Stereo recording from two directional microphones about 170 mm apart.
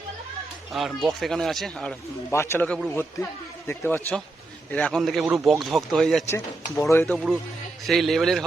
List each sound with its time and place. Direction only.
0.7 s speech: centre (ahead or behind)
2.3 s speech: 15° left (ahead or behind)
2.6 s speech: centre (ahead or behind)
2.9 s speech: 15° left (ahead or behind)
6.7 s speech: 15° left (ahead or behind)
7.0 s speech: centre (ahead or behind)